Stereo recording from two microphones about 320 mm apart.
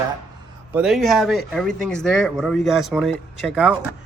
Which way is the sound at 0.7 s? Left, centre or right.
Centre.